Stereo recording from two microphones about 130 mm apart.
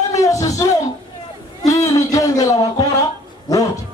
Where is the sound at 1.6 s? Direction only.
25° left (ahead or behind).